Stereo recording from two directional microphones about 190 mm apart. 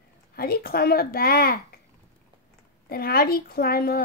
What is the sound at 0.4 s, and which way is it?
A woman's voice, 50° left (ahead or behind).